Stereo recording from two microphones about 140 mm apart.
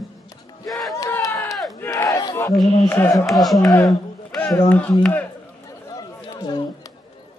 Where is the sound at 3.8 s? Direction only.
5° left (ahead or behind).